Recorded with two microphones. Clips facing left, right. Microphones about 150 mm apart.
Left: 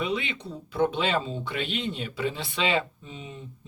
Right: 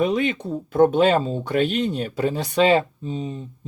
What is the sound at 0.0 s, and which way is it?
Speech, 45° right (ahead or behind).